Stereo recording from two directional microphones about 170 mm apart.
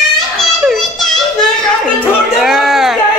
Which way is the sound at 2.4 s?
Centre (ahead or behind).